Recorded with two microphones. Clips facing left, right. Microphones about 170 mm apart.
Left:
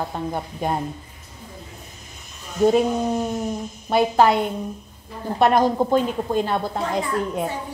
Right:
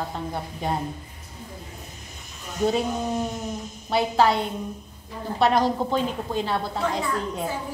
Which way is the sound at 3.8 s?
50° left (ahead or behind).